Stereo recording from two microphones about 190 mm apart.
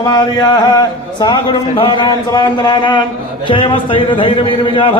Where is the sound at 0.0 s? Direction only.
20° left (ahead or behind).